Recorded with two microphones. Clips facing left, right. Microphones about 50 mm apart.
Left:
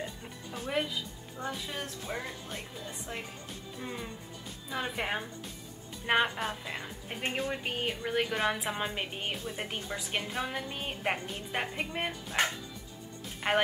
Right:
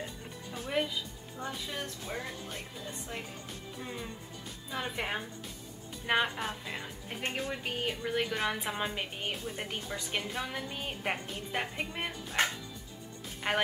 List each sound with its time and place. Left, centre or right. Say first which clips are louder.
0.5 s music: even; centre
1.4 s a woman's voice: left 1 dB; centre
13.4 s speech: left 3 dB; centre